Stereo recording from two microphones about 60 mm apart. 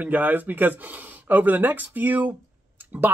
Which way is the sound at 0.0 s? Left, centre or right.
Right.